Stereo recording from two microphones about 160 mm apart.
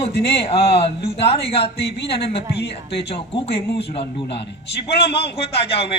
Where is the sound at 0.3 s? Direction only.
35° left (ahead or behind).